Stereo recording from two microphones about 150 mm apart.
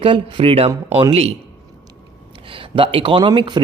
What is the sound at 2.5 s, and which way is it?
Speech, 35° right (ahead or behind).